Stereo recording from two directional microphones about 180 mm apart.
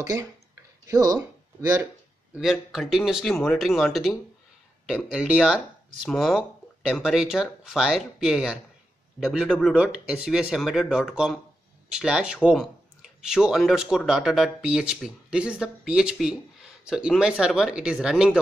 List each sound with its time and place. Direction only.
0.0 s speech: 20° right (ahead or behind)
2.3 s speech: centre (ahead or behind)